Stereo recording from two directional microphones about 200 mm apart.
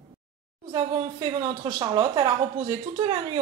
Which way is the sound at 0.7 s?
25° right (ahead or behind).